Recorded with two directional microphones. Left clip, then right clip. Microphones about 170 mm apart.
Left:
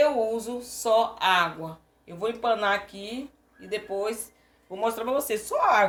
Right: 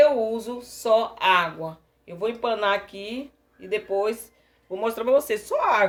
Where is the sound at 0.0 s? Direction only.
40° right (ahead or behind).